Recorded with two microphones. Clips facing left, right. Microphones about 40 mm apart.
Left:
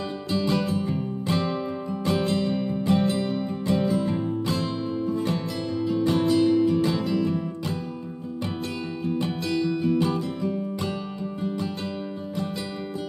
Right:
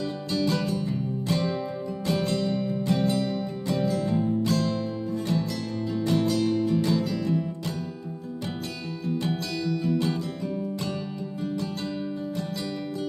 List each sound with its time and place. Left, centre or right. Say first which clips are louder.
0.3 s music: left 2 dB; left
9.0 s music: left 1 dB; left